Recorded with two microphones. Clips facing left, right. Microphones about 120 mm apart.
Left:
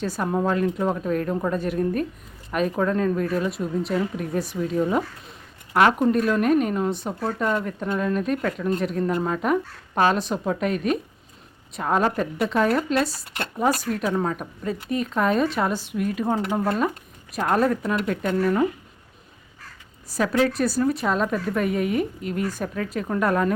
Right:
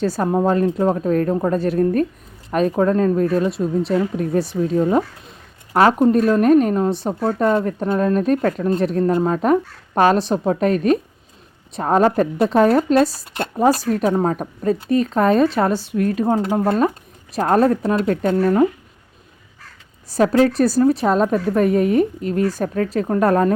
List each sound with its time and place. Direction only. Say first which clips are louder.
0.0 s speech: right 6 dB; 30° right (ahead or behind)
6.1 s speech: right 6 dB; 35° right (ahead or behind)
7.3 s speech: right 8 dB; 40° right (ahead or behind)
16.2 s speech: right 4 dB; 25° right (ahead or behind)
20.1 s speech: right 7 dB; 40° right (ahead or behind)